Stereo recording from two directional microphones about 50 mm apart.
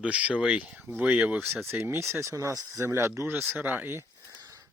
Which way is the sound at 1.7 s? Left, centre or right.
Right.